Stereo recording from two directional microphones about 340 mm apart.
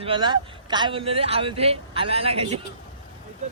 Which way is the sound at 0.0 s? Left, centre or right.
Centre.